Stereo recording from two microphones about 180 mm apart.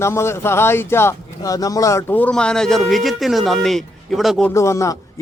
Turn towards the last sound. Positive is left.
turn(degrees=15)  # may be behind; listen again after turning